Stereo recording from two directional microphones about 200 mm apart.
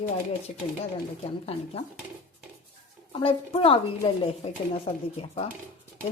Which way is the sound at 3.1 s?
25° left (ahead or behind).